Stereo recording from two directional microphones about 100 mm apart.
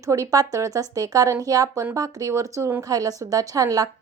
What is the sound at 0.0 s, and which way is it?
Speech, 30° right (ahead or behind).